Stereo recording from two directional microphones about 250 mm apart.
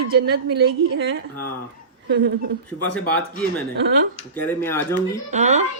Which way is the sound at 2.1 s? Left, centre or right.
Right.